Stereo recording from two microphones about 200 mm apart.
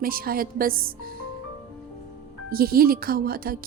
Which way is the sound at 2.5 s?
50° right (ahead or behind).